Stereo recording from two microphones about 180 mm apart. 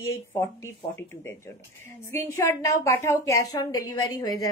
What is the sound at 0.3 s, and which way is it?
A woman's voice, 15° left (ahead or behind).